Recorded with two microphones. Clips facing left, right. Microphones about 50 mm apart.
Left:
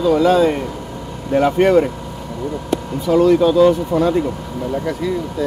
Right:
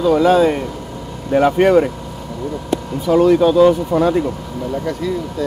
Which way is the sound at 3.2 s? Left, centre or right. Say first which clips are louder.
Right 1 dB; right.